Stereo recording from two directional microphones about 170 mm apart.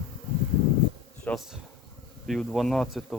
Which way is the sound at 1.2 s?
Centre (ahead or behind).